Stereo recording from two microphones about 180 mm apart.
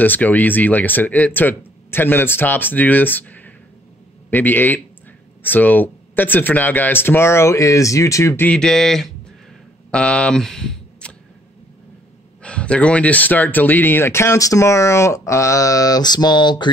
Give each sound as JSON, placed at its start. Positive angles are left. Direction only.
{"t": 0.0, "sound": "speech", "side_deg": 10}
{"t": 12.4, "sound": "speech", "side_deg": 5}